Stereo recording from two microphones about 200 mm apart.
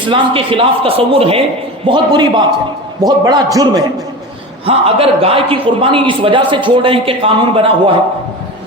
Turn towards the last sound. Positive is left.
turn(degrees=-25)  # may be behind; listen again after turning